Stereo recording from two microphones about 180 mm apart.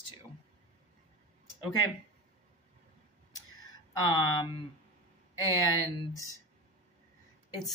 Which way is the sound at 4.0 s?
20° left (ahead or behind).